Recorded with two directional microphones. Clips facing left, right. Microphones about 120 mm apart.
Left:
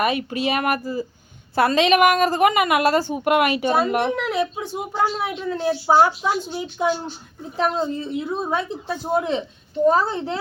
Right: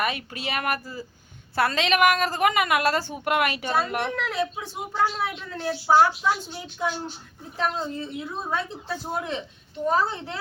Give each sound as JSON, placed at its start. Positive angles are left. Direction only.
{"t": 0.0, "sound": "a woman's voice", "side_deg": 20}
{"t": 9.8, "sound": "a woman's voice", "side_deg": 35}